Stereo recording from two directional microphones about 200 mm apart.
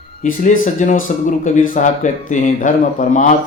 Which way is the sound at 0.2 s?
40° left (ahead or behind).